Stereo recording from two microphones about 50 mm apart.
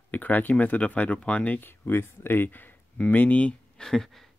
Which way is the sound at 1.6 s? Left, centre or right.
Left.